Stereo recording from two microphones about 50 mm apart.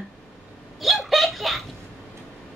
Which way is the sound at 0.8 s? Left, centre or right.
Centre.